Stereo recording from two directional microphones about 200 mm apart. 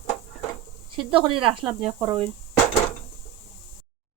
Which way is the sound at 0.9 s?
25° right (ahead or behind).